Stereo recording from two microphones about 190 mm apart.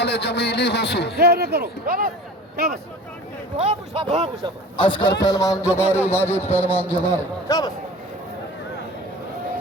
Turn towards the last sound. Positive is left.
turn(degrees=20)  # may be behind; listen again after turning